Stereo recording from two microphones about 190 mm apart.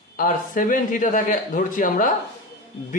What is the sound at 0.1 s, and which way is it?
Speech, 45° left (ahead or behind).